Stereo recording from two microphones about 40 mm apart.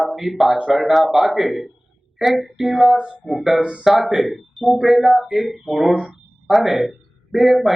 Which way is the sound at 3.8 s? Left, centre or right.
Centre.